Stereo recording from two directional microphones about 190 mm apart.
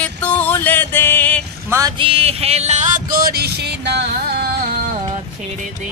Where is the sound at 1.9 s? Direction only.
30° right (ahead or behind); by 4.8 s 50° right (ahead or behind).